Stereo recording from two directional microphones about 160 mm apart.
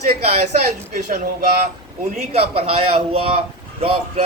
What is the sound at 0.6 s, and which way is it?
Speech, 50° right (ahead or behind).